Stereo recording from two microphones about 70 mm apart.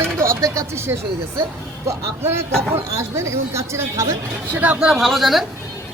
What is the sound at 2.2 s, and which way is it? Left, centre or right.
Speech, right.